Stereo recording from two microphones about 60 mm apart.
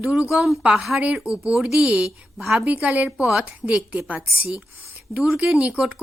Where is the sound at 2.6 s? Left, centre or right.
Right.